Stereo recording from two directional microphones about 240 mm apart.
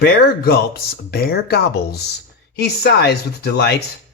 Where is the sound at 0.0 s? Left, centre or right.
Left.